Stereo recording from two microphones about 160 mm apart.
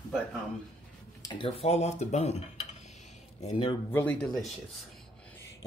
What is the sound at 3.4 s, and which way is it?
Speech, 30° left (ahead or behind).